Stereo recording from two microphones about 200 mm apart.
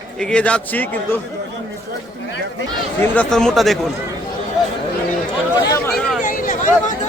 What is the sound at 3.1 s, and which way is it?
Speech, 5° left (ahead or behind).